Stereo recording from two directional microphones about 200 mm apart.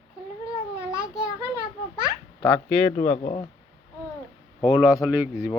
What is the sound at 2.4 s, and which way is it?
A man's voice, 30° left (ahead or behind).